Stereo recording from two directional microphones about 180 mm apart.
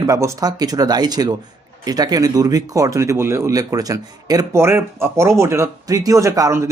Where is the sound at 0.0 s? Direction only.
15° right (ahead or behind).